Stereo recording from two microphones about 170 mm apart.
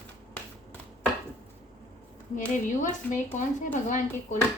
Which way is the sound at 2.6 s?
50° left (ahead or behind).